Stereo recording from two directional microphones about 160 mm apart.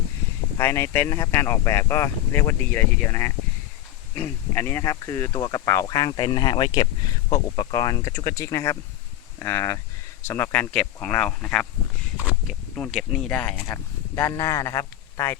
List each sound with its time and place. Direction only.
0.5 s speech: 15° left (ahead or behind)
12.2 s a sound: 10° right (ahead or behind)
12.7 s a man's voice: 5° left (ahead or behind)